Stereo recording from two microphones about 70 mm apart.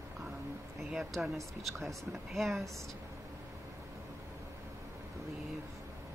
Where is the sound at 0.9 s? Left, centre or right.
Centre.